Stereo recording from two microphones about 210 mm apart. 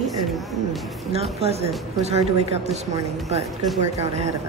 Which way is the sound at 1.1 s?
30° right (ahead or behind).